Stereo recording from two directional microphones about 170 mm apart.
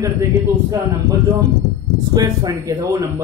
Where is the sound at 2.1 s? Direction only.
25° right (ahead or behind).